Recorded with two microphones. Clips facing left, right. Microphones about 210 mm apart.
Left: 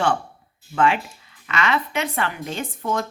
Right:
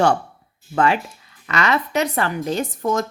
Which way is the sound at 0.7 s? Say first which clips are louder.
Right 1 dB; 40° right (ahead or behind).